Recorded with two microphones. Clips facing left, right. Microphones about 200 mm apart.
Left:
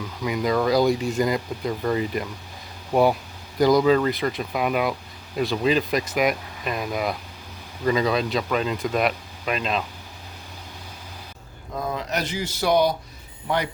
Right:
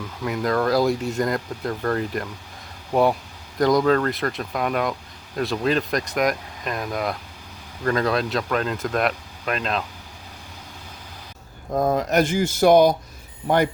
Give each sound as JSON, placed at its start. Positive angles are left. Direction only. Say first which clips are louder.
{"t": 0.2, "sound": "speech", "louder": "even", "side_deg": 0}
{"t": 11.7, "sound": "speech", "louder": "right 8 dB", "side_deg": -45}